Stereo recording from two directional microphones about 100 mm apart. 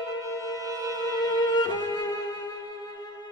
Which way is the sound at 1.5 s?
45° left (ahead or behind).